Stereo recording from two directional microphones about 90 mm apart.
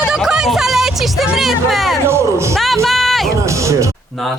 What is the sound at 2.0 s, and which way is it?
Speech, 30° right (ahead or behind).